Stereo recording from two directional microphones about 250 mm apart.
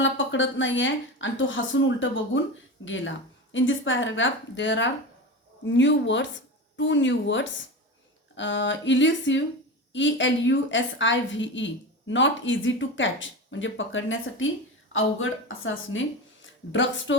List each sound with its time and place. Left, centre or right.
0.0 s a woman's voice: left